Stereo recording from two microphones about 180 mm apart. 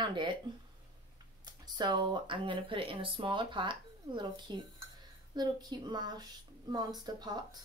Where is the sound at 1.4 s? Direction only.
25° right (ahead or behind).